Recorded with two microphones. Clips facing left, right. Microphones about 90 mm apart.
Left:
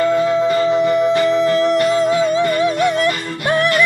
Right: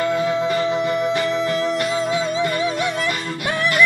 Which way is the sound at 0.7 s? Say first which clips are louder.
Left 6 dB; 30° left (ahead or behind).